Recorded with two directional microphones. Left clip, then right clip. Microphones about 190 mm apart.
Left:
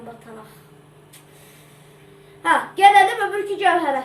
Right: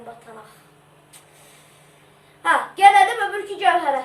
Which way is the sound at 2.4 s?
Centre (ahead or behind).